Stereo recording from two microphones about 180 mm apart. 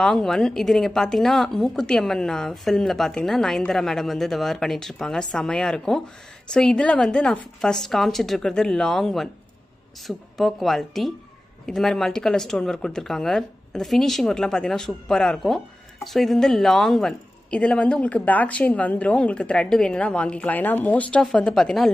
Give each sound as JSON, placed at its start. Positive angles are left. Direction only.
{"t": 0.0, "sound": "speech", "side_deg": 5}